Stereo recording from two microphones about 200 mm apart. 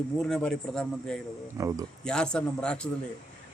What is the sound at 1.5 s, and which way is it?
Speech, 15° right (ahead or behind).